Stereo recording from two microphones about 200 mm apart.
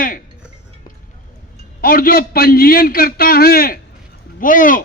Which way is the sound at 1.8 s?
45° left (ahead or behind).